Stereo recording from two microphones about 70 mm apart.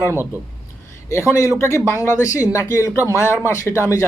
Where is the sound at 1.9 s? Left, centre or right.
Left.